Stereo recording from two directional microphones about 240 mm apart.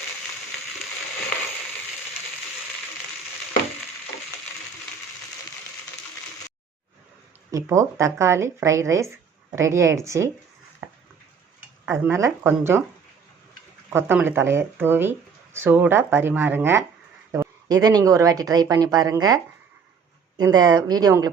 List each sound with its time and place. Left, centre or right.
7.5 s speech: centre
12.0 s speech: centre
13.9 s speech: centre